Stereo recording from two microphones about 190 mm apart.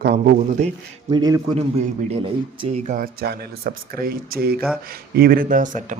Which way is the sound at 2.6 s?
40° right (ahead or behind).